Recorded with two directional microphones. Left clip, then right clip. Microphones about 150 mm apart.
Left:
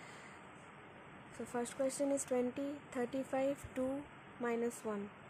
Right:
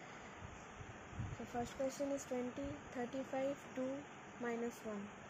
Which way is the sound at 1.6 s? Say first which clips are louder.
Left 4 dB; 40° left (ahead or behind).